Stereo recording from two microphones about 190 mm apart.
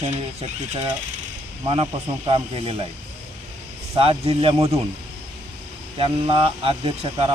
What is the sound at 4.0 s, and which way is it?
Speech, 30° right (ahead or behind).